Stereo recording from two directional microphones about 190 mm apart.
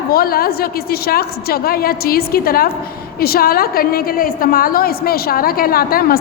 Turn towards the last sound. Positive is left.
turn(degrees=50)  # may be behind; listen again after turning